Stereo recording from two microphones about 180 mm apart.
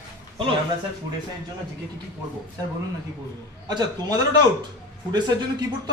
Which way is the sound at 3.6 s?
20° right (ahead or behind).